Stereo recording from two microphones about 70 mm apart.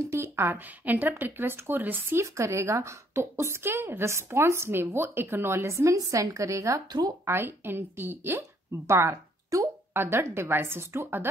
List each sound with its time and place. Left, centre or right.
0.1 s a woman's voice: right
2.3 s a woman's voice: right
6.9 s speech: right
7.2 s a woman's voice: right
9.5 s a sound: right
9.9 s a woman's voice: right